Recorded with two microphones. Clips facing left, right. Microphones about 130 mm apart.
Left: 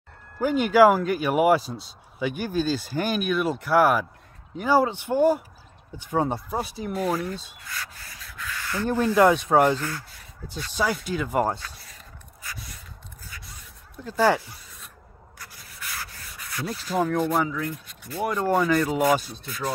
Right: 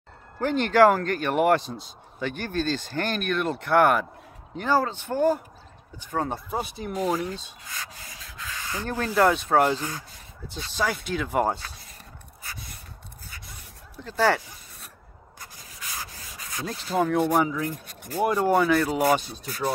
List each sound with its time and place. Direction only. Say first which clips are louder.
0.4 s speech: left 1 dB; 10° left (ahead or behind)
7.0 s sanding: even; 15° right (ahead or behind)
8.8 s speech: left 3 dB; 10° left (ahead or behind)
9.7 s speech: left 2 dB; 15° right (ahead or behind)
10.8 s speech: left 1 dB; 5° left (ahead or behind)
14.0 s speech: left 2 dB; 10° left (ahead or behind)
15.3 s rub: even; 20° right (ahead or behind)
16.9 s speech: right 1 dB; centre (ahead or behind)
17.3 s speech: right 2 dB; 15° right (ahead or behind)
17.6 s speech: right 1 dB; 45° right (ahead or behind)
18.3 s speech: even; 5° right (ahead or behind)